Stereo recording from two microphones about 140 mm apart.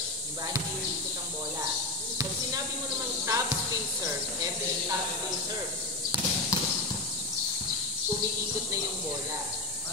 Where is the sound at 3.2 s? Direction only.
20° right (ahead or behind).